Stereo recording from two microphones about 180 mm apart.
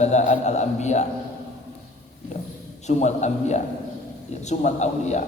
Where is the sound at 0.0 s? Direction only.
40° left (ahead or behind).